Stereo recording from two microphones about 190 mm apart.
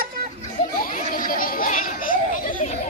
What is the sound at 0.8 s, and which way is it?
Children playing, 50° left (ahead or behind).